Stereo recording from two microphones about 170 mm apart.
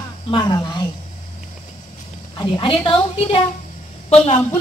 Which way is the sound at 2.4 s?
30° left (ahead or behind).